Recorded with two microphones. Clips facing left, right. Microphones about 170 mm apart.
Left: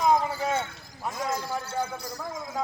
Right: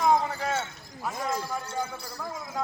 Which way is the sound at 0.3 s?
10° left (ahead or behind).